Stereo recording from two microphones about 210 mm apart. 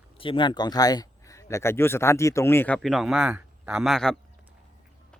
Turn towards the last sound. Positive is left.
turn(degrees=0)  # may be behind; listen again after turning